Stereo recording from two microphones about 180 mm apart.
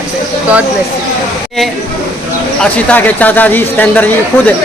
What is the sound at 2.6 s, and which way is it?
A man's voice, 10° left (ahead or behind).